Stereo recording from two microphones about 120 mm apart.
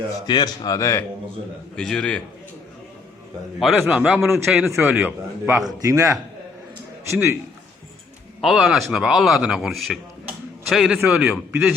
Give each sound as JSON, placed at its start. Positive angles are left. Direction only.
{"t": 0.1, "sound": "speech", "side_deg": 35}
{"t": 1.7, "sound": "a man's voice", "side_deg": 5}
{"t": 3.6, "sound": "a man's voice", "side_deg": -5}
{"t": 4.6, "sound": "a man's voice", "side_deg": -20}
{"t": 5.6, "sound": "a man's voice", "side_deg": -30}
{"t": 8.4, "sound": "a man's voice", "side_deg": -5}